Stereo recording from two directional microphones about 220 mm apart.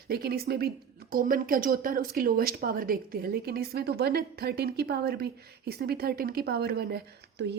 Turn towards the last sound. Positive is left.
turn(degrees=-50)  # may be behind; listen again after turning